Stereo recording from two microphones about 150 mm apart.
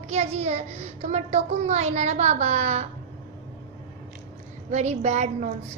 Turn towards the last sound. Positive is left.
turn(degrees=-50)  # may be behind; listen again after turning